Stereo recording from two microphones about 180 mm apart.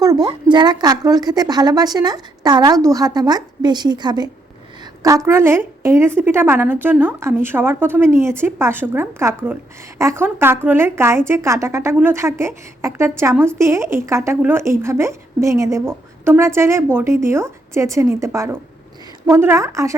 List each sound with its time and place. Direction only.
0.0 s a woman's voice: 20° right (ahead or behind)